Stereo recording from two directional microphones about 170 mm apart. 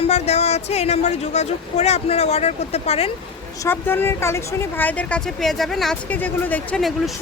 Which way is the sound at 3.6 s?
15° left (ahead or behind).